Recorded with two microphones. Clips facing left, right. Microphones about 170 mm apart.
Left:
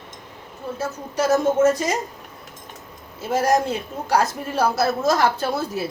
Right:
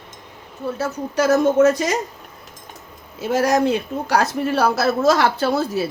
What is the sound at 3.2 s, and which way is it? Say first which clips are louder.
Speech: right 2 dB; 75° right (ahead or behind).